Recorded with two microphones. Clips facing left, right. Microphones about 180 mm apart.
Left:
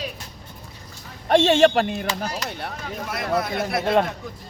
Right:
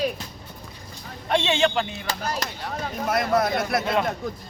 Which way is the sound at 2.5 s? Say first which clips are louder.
Left 2 dB; 60° left (ahead or behind).